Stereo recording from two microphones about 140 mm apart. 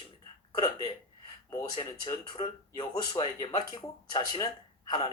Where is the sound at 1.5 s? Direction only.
30° left (ahead or behind).